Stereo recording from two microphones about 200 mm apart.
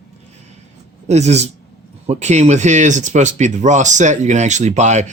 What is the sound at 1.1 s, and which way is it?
Speech, 35° right (ahead or behind).